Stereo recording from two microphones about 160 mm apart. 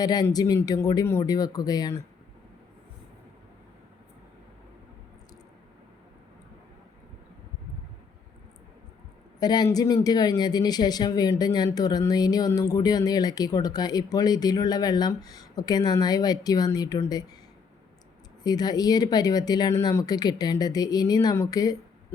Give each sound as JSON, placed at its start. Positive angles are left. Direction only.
{"t": 0.0, "sound": "speech", "side_deg": 25}
{"t": 9.4, "sound": "speech", "side_deg": 25}
{"t": 18.4, "sound": "speech", "side_deg": 25}